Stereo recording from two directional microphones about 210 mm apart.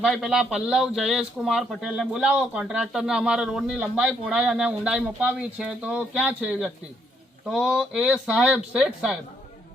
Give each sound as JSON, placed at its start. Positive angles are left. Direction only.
{"t": 0.0, "sound": "speech", "side_deg": 0}